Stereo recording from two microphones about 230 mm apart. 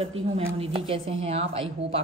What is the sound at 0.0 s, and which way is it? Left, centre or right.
A woman's voice, right.